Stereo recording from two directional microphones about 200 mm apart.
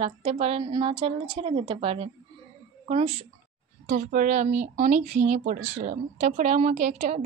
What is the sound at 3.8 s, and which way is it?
A woman's voice, 40° right (ahead or behind).